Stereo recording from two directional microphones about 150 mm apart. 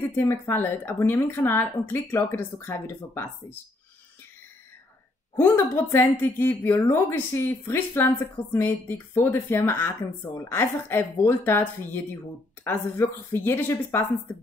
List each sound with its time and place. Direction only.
0.1 s speech: 15° left (ahead or behind)
5.3 s speech: 15° left (ahead or behind)